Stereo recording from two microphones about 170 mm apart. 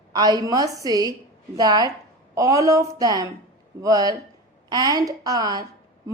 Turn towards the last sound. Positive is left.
turn(degrees=-20)  # may be behind; listen again after turning